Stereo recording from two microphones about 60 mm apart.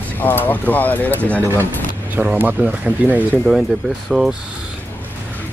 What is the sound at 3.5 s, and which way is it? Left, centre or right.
Speech, centre.